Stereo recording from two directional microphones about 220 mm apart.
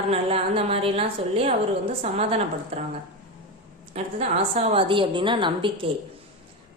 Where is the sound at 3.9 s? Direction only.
30° right (ahead or behind).